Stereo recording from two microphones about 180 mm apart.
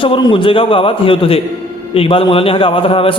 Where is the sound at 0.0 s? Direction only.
25° left (ahead or behind).